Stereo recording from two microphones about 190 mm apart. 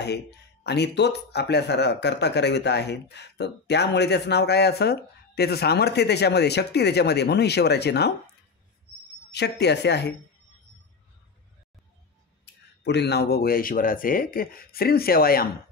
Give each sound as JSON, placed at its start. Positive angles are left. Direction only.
{"t": 0.7, "sound": "speech", "side_deg": 60}
{"t": 9.3, "sound": "speech", "side_deg": 60}
{"t": 12.8, "sound": "speech", "side_deg": 60}